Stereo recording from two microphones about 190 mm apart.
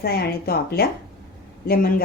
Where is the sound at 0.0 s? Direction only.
55° left (ahead or behind).